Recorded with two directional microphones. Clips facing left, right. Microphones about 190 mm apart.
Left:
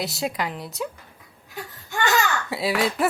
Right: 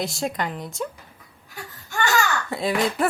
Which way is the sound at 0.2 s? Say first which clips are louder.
Even; 5° left (ahead or behind).